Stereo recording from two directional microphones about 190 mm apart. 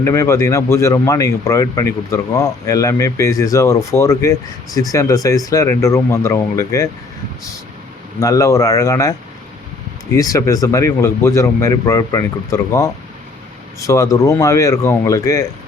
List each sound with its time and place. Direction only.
0.0 s speech: 15° left (ahead or behind)
8.2 s speech: 15° left (ahead or behind)
10.2 s speech: 20° left (ahead or behind)